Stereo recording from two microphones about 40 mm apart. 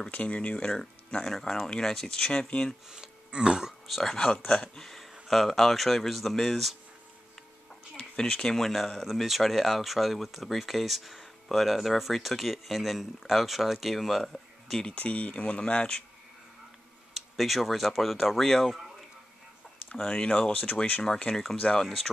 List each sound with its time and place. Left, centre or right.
0.1 s speech: left
0.7 s speech: centre
2.3 s speech: left
2.9 s speech: centre
3.8 s speech: centre
4.7 s a sound: centre
5.3 s speech: centre
8.2 s speech: centre
8.5 s speech: centre
15.0 s speech: left
17.1 s speech: centre
20.0 s speech: left
21.3 s speech: centre